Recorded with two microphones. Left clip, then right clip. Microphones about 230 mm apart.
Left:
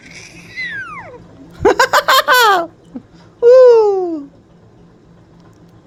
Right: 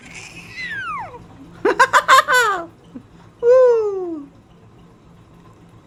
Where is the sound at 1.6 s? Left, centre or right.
Left.